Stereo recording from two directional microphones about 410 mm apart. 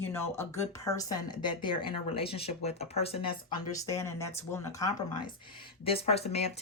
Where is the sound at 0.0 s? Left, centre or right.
Centre.